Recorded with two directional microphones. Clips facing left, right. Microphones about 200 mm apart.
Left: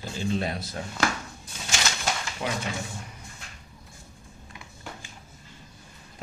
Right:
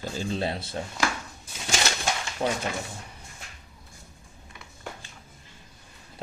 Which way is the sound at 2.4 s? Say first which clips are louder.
Right 4 dB; 35° right (ahead or behind).